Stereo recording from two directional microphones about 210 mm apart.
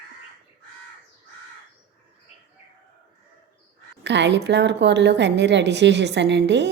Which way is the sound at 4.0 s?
55° right (ahead or behind).